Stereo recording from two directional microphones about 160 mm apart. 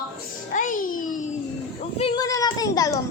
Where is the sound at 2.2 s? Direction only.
25° left (ahead or behind).